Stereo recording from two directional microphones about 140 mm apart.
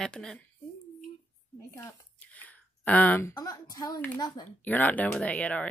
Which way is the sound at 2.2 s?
10° left (ahead or behind).